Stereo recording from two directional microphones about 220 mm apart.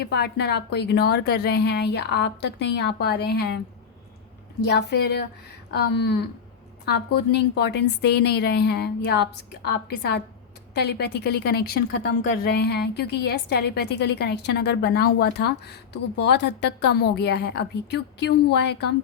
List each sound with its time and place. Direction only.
0.1 s a woman's voice: 50° left (ahead or behind)
4.6 s a woman's voice: 50° left (ahead or behind)